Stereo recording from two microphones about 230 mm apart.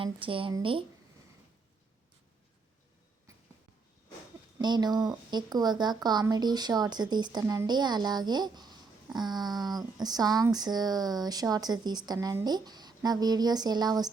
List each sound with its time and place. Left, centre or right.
0.0 s speech: right
4.5 s speech: centre